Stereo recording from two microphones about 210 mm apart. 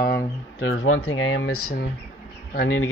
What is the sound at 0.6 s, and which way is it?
Speech, 70° left (ahead or behind).